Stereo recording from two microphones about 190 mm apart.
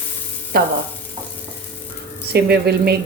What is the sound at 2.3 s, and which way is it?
Speech, 60° right (ahead or behind).